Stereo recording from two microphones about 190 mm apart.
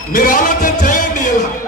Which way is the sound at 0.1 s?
45° left (ahead or behind).